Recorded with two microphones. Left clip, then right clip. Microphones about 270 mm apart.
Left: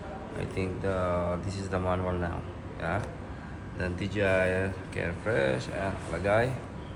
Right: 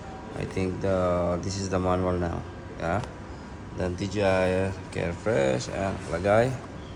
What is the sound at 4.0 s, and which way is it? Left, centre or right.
Speech, right.